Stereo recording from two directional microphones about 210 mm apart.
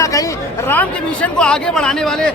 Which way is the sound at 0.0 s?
15° left (ahead or behind).